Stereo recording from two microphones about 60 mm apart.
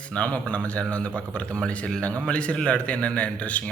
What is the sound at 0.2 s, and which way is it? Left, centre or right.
A man's voice, left.